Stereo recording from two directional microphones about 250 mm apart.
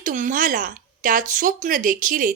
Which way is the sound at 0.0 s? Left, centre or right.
Right.